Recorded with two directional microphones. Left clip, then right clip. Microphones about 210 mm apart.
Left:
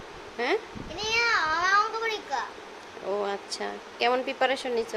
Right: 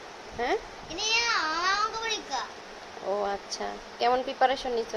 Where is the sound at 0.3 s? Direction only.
15° left (ahead or behind).